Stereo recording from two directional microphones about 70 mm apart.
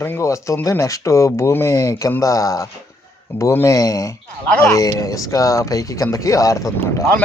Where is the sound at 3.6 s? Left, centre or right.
Left.